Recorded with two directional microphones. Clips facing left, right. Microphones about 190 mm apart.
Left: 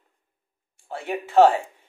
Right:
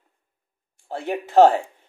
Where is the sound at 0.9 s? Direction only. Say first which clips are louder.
Right 2 dB; 40° right (ahead or behind).